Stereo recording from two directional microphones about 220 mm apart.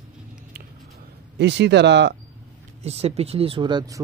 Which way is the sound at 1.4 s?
50° right (ahead or behind).